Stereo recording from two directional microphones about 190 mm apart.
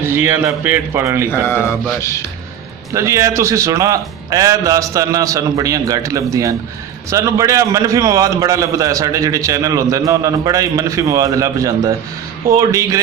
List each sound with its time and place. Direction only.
0.0 s a man's voice: 15° right (ahead or behind)
1.5 s music: 15° left (ahead or behind)
2.9 s a man's voice: 15° right (ahead or behind)